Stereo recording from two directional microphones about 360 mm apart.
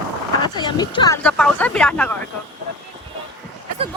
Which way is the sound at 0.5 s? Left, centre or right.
Centre.